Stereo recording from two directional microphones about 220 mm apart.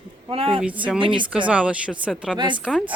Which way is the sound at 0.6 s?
5° right (ahead or behind).